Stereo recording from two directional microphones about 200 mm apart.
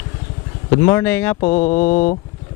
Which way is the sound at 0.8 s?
10° left (ahead or behind).